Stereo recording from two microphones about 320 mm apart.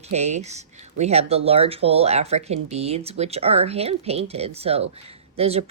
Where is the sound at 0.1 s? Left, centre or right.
Right.